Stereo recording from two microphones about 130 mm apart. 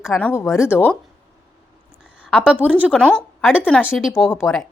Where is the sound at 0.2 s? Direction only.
10° left (ahead or behind).